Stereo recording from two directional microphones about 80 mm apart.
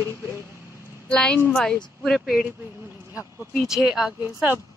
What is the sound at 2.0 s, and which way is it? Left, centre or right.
Speech, centre.